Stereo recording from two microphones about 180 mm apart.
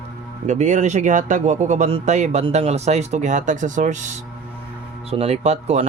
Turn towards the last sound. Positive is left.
turn(degrees=-35)  # may be behind; listen again after turning